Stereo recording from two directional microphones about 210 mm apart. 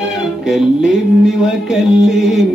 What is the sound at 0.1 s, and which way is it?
Music, centre (ahead or behind).